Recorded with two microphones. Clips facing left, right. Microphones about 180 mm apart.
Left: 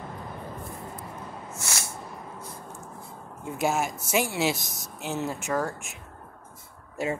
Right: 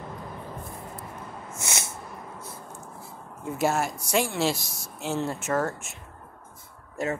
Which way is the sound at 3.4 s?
Centre (ahead or behind).